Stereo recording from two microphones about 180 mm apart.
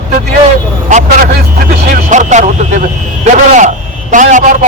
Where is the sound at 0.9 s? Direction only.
45° right (ahead or behind).